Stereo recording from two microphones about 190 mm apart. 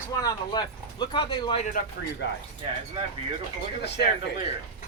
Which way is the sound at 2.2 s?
65° left (ahead or behind).